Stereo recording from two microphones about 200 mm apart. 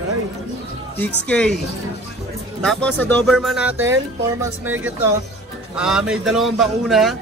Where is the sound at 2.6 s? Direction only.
5° left (ahead or behind).